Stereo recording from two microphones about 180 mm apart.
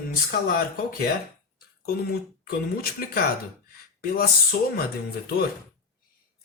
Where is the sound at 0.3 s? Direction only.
55° left (ahead or behind).